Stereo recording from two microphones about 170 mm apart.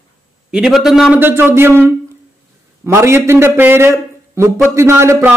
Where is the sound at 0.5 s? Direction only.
5° right (ahead or behind).